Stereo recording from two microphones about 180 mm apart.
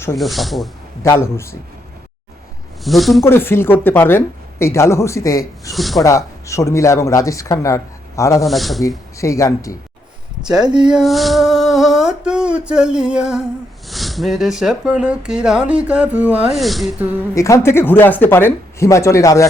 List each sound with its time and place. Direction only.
0.2 s speech: centre (ahead or behind)
1.0 s speech: 15° left (ahead or behind)
2.8 s speech: centre (ahead or behind)
3.2 s speech: 15° left (ahead or behind)
5.7 s speech: centre (ahead or behind)
6.0 s speech: 15° left (ahead or behind)
8.4 s speech: centre (ahead or behind)
9.1 s speech: 15° left (ahead or behind)
10.6 s speech: 25° right (ahead or behind)
10.8 s a sound: centre (ahead or behind)
13.8 s speech: centre (ahead or behind)
17.3 s speech: 15° left (ahead or behind)